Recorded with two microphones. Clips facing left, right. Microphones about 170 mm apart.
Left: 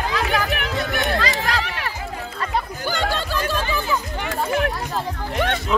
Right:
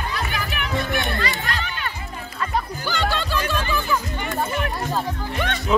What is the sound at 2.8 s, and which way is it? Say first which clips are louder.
Music: left 1 dB; 45° left (ahead or behind).